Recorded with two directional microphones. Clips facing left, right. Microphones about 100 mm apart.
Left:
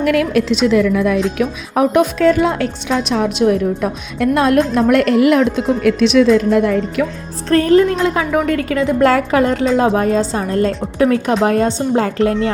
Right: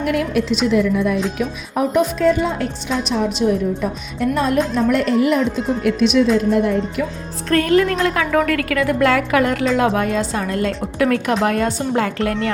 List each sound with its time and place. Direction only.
0.0 s a woman's voice: 90° left
4.7 s a woman's voice: 70° left (ahead or behind); by 7.0 s 90° left
7.5 s a woman's voice: 30° left (ahead or behind)
9.0 s a woman's voice: 35° left (ahead or behind)